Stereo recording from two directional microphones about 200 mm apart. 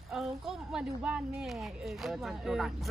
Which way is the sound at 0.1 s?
Centre (ahead or behind).